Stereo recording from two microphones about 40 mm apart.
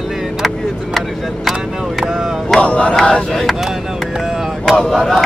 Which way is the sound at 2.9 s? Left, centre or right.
Centre.